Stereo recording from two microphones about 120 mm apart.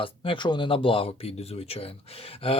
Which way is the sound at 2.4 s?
50° left (ahead or behind).